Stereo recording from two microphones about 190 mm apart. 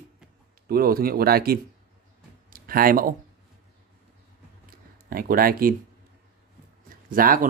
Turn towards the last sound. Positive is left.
turn(degrees=-50)  # may be behind; listen again after turning